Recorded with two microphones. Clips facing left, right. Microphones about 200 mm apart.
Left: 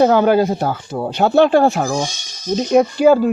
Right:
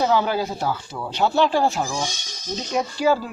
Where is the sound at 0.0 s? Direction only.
55° left (ahead or behind).